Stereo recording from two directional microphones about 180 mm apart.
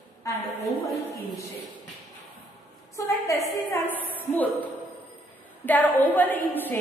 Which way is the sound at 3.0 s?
15° left (ahead or behind).